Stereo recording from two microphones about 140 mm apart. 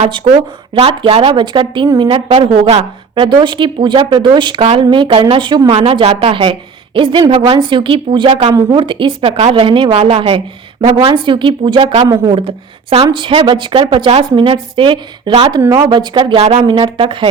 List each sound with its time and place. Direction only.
0.8 s speech: 45° right (ahead or behind)
5.7 s speech: 45° right (ahead or behind)
12.0 s speech: 25° right (ahead or behind)
12.3 s speech: 40° right (ahead or behind)
16.3 s speech: 50° right (ahead or behind)
16.6 s speech: 35° right (ahead or behind)